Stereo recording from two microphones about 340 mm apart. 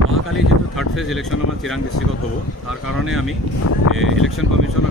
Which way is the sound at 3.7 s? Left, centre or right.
Left.